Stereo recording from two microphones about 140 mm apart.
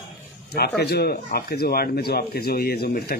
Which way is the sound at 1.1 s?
90° left.